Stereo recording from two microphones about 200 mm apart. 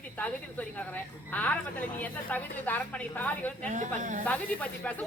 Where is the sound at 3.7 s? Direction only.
40° right (ahead or behind).